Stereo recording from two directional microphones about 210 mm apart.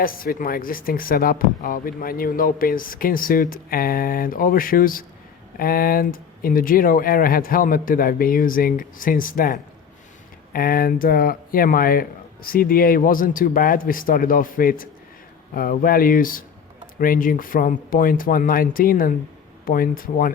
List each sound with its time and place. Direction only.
0.0 s speech: 45° left (ahead or behind)